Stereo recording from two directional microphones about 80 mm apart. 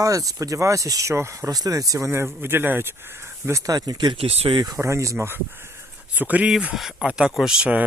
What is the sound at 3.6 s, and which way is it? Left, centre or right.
Speech, right.